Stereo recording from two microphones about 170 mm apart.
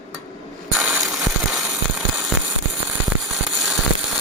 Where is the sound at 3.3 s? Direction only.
Centre (ahead or behind).